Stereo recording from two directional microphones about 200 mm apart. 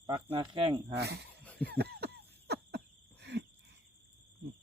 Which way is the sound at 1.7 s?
55° right (ahead or behind).